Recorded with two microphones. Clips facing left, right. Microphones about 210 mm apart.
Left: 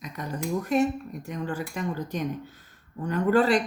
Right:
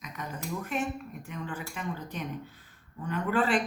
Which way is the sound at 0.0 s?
35° left (ahead or behind).